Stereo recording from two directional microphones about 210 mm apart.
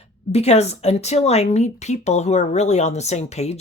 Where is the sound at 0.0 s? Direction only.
30° left (ahead or behind).